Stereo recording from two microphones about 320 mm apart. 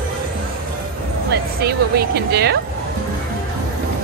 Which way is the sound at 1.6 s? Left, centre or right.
Right.